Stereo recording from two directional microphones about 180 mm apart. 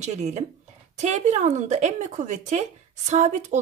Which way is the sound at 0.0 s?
40° right (ahead or behind).